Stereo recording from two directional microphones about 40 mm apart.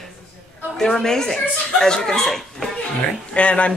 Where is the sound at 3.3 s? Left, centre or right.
Left.